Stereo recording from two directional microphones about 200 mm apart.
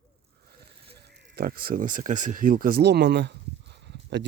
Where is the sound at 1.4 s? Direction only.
50° right (ahead or behind).